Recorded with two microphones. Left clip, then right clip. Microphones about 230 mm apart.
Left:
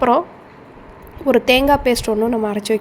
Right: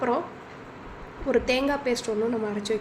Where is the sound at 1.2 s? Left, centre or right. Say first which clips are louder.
Left 10 dB; left.